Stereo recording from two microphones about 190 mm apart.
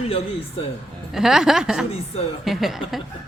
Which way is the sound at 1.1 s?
Centre (ahead or behind).